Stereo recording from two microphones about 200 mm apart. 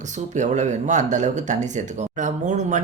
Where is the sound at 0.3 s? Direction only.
35° right (ahead or behind).